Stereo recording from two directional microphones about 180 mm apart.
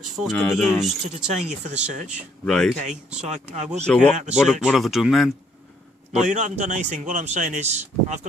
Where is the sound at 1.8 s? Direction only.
45° right (ahead or behind).